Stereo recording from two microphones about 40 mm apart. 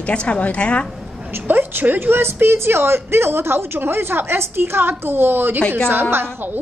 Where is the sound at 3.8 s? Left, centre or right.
Right.